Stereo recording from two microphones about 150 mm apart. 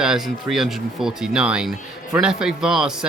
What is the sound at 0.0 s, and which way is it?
Speech, 5° right (ahead or behind).